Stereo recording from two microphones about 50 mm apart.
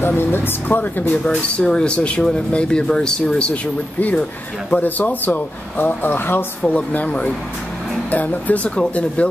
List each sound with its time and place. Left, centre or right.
0.0 s speech: left
1.2 s speech: centre; by 6.4 s left
6.6 s speech: left